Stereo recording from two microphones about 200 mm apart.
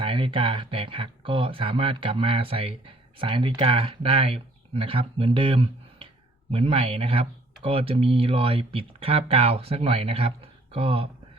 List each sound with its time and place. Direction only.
0.0 s speech: 25° right (ahead or behind)